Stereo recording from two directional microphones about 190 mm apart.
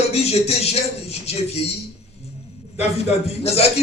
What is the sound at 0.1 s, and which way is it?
Speech, 35° left (ahead or behind).